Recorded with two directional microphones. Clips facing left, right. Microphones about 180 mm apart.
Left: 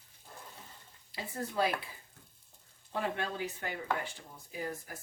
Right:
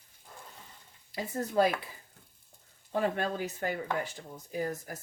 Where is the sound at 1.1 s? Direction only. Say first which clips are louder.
Right 6 dB; 45° right (ahead or behind).